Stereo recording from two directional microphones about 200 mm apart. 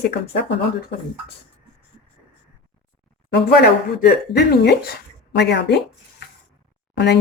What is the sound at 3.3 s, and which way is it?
Speech, 55° left (ahead or behind).